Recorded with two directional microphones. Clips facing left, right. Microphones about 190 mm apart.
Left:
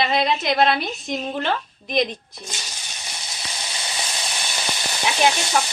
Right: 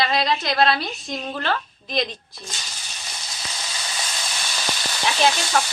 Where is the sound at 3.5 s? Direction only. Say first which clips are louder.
Left 1 dB; 20° left (ahead or behind).